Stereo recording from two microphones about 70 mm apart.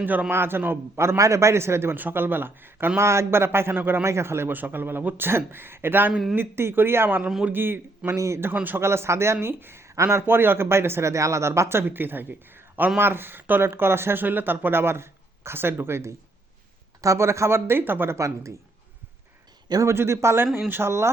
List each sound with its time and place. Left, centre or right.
0.0 s speech: right
3.0 s speech: right
7.2 s a man's voice: centre
7.5 s speech: right
8.1 s speech: right
8.6 s speech: right
19.8 s speech: right